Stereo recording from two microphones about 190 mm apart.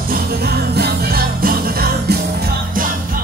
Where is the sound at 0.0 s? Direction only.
50° right (ahead or behind).